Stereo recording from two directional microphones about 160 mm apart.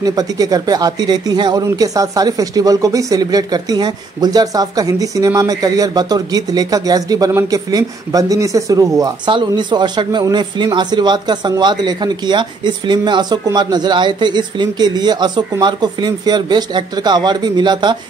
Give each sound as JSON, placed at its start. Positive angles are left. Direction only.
{"t": 0.0, "sound": "speech", "side_deg": -25}